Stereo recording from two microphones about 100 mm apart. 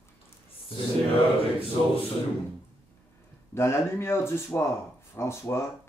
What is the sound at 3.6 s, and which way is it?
Speech, 25° left (ahead or behind).